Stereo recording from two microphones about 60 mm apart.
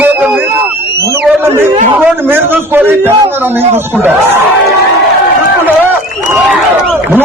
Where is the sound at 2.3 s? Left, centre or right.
Right.